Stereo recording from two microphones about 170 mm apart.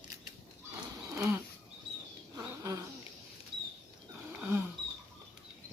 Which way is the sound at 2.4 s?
15° right (ahead or behind).